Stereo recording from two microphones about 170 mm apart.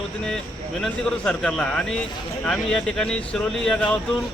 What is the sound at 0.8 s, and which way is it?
A man's voice, 5° left (ahead or behind).